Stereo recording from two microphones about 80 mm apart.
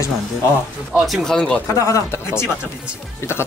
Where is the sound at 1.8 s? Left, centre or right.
Left.